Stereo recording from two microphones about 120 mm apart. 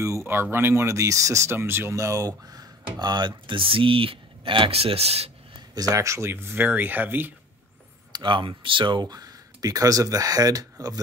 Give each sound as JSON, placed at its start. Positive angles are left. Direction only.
{"t": 0.0, "sound": "speech", "side_deg": -25}
{"t": 5.8, "sound": "speech", "side_deg": -25}
{"t": 8.1, "sound": "speech", "side_deg": -40}